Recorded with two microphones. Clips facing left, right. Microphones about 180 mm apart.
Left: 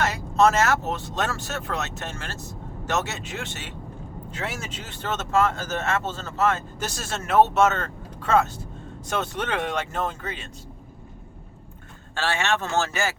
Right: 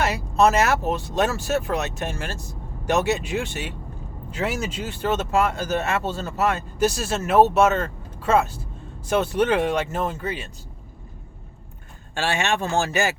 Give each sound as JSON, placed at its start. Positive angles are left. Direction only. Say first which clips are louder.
{"t": 0.0, "sound": "speech", "louder": "right 1 dB", "side_deg": -10}
{"t": 12.1, "sound": "speech", "louder": "right 2 dB", "side_deg": -15}